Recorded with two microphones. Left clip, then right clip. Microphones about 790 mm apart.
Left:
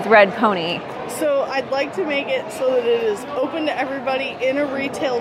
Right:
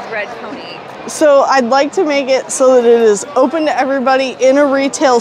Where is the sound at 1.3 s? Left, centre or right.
Right.